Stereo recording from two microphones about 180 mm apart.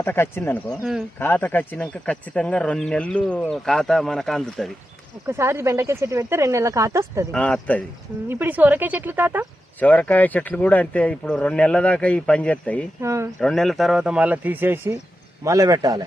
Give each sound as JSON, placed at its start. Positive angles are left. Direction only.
{"t": 0.0, "sound": "speech", "side_deg": 10}
{"t": 5.2, "sound": "speech", "side_deg": -15}
{"t": 7.3, "sound": "speech", "side_deg": 5}
{"t": 8.3, "sound": "speech", "side_deg": -10}
{"t": 9.8, "sound": "speech", "side_deg": 10}
{"t": 13.0, "sound": "speech", "side_deg": -15}
{"t": 13.4, "sound": "a man's voice", "side_deg": 0}